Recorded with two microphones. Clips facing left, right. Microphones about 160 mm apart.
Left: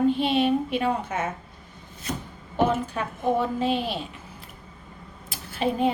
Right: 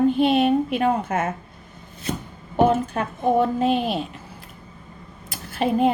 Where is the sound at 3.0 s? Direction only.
50° right (ahead or behind).